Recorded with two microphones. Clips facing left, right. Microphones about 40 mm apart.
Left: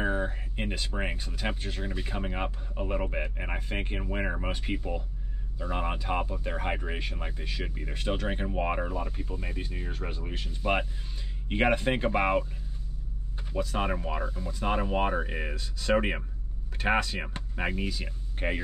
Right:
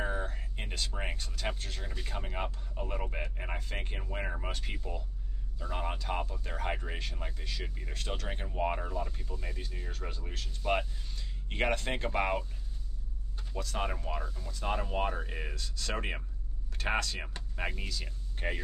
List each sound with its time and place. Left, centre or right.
0.0 s speech: left
13.5 s speech: centre